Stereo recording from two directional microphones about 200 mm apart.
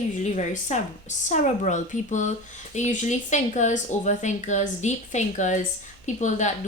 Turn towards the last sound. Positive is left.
turn(degrees=35)  # may be behind; listen again after turning